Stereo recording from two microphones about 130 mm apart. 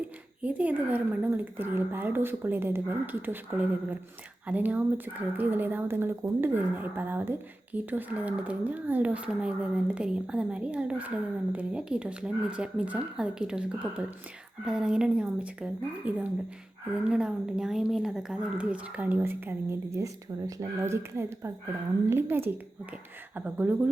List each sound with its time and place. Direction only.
0.4 s speech: 10° right (ahead or behind)